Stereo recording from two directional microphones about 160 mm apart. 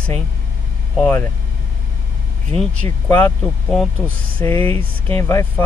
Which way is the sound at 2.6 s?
10° left (ahead or behind).